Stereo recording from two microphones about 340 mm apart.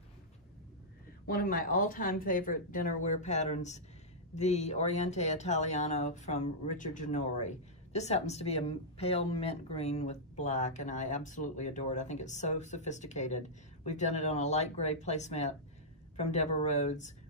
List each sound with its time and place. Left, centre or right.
1.2 s speech: left